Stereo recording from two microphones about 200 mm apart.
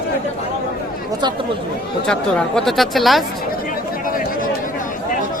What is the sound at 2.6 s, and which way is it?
Speech, centre (ahead or behind).